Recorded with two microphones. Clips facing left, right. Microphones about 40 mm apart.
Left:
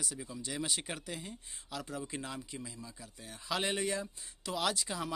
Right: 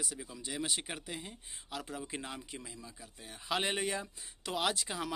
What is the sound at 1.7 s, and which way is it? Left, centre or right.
A man's voice, right.